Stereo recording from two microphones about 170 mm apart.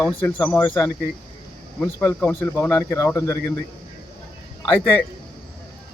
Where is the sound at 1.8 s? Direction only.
10° left (ahead or behind).